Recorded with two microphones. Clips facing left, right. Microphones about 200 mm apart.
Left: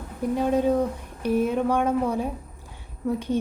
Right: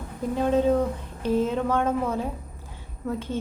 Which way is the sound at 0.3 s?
10° left (ahead or behind).